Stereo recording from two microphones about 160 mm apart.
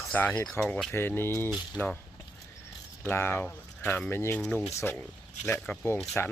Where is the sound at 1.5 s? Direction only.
10° right (ahead or behind).